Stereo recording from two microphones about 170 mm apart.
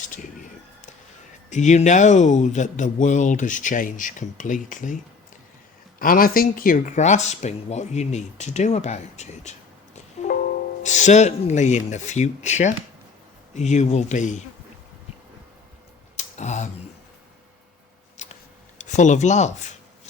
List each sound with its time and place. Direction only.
1.5 s speech: 45° left (ahead or behind)
6.0 s speech: 55° left (ahead or behind)
10.2 s music: 40° left (ahead or behind)
10.8 s speech: 45° left (ahead or behind)
16.1 s a sound: 45° left (ahead or behind)
18.2 s a sound: 45° left (ahead or behind)
18.8 s speech: 45° left (ahead or behind)